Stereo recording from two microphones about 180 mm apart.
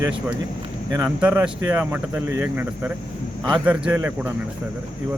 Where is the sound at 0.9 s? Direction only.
15° right (ahead or behind).